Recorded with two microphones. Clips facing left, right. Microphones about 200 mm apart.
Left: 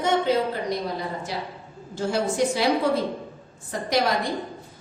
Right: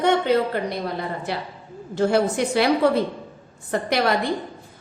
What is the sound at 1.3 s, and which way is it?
A woman's voice, 60° right (ahead or behind).